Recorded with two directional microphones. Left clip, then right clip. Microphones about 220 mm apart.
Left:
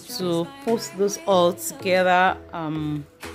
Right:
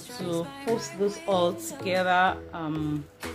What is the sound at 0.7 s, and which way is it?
Speech, centre (ahead or behind).